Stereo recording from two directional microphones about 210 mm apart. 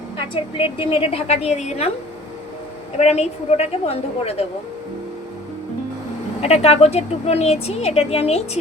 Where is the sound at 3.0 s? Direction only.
30° left (ahead or behind).